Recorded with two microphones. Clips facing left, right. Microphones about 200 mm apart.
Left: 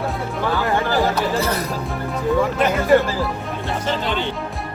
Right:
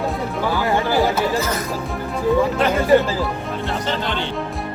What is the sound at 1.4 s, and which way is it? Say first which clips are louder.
Music: left 1 dB; 35° left (ahead or behind).